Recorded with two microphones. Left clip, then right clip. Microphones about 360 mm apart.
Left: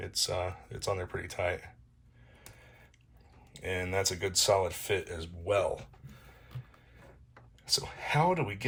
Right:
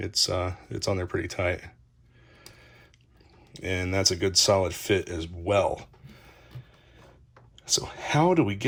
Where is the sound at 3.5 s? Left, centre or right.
Right.